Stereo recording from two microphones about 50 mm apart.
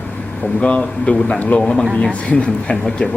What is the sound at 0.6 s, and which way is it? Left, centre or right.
A man's voice, left.